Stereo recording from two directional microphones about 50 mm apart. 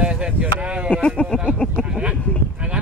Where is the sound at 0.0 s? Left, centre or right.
Right.